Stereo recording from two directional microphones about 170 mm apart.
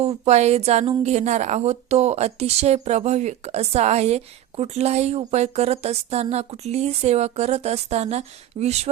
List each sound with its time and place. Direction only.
0.3 s a woman's voice: 40° right (ahead or behind)